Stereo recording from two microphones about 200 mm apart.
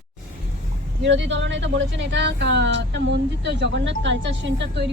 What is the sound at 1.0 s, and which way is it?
Speech, 65° right (ahead or behind).